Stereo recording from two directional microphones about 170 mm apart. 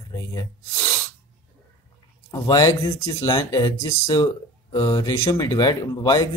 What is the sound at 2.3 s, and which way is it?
Speech, 20° left (ahead or behind).